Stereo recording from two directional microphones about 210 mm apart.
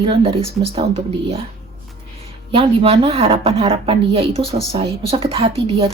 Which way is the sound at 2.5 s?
25° right (ahead or behind).